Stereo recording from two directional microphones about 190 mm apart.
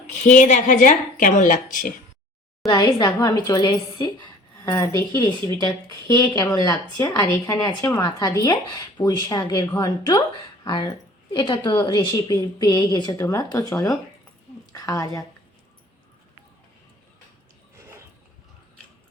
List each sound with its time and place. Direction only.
0.2 s speech: 40° left (ahead or behind)
2.6 s speech: 20° left (ahead or behind)
6.1 s speech: 20° left (ahead or behind)
17.7 s a sound: 15° right (ahead or behind)